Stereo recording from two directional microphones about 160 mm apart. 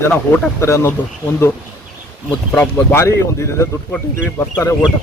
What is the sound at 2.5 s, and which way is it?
Speech, 15° left (ahead or behind).